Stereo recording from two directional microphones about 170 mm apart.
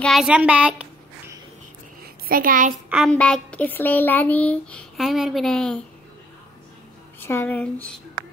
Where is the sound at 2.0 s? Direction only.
55° right (ahead or behind).